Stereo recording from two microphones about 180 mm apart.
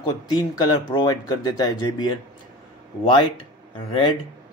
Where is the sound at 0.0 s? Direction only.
25° left (ahead or behind).